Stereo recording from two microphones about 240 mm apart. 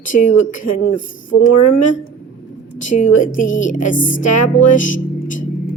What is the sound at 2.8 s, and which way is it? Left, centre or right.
A woman's voice, left.